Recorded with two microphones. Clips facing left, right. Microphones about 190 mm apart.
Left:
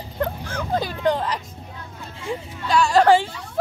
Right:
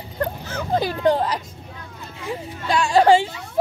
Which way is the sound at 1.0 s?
35° right (ahead or behind).